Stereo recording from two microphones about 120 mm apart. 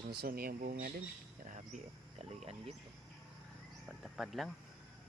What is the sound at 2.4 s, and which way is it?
Speech, 55° right (ahead or behind).